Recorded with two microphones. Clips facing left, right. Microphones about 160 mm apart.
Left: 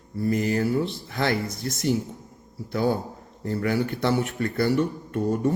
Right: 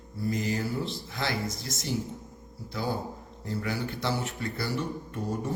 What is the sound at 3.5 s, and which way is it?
Speech, 60° left (ahead or behind).